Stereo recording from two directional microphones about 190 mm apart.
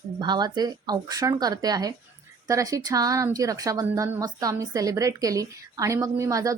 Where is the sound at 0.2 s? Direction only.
20° right (ahead or behind).